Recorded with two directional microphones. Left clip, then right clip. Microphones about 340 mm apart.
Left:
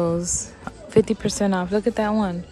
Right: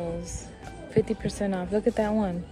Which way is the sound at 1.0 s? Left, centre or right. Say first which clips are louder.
Left 7 dB; centre.